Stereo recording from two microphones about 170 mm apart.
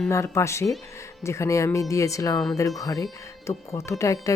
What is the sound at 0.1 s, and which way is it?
Speech, 15° left (ahead or behind).